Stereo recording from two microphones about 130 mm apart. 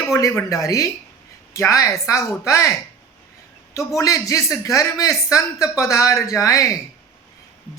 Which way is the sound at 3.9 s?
25° left (ahead or behind).